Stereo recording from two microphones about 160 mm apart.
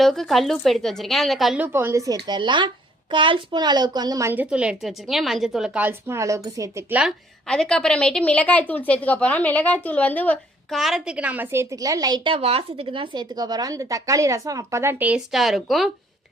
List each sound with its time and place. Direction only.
0.0 s a woman's voice: centre (ahead or behind)
1.6 s a woman's voice: 15° right (ahead or behind)
7.4 s a woman's voice: 5° left (ahead or behind)
10.8 s a woman's voice: centre (ahead or behind)